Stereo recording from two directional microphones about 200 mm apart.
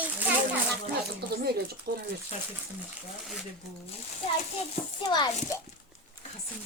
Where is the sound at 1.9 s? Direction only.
55° right (ahead or behind).